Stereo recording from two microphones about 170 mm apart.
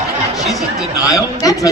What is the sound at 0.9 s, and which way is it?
Speech, 20° left (ahead or behind).